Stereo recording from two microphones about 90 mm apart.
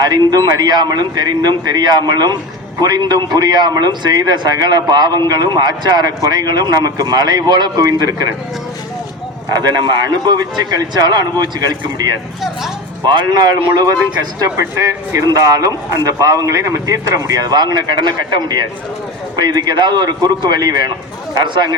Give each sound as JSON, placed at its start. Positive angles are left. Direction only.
{"t": 0.0, "sound": "a man's voice", "side_deg": -50}
{"t": 9.6, "sound": "a man's voice", "side_deg": -50}
{"t": 14.4, "sound": "a man's voice", "side_deg": -35}